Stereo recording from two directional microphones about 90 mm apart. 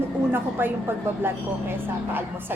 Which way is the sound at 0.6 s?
25° right (ahead or behind).